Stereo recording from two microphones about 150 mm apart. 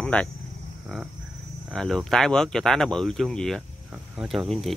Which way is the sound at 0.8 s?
5° right (ahead or behind).